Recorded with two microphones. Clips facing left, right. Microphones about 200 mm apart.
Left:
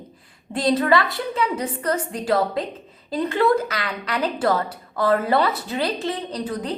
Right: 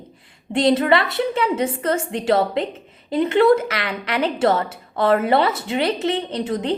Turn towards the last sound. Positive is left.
turn(degrees=-25)  # may be behind; listen again after turning